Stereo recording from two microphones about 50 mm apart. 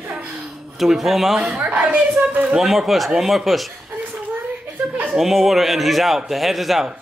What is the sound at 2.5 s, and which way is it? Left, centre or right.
Speech, centre.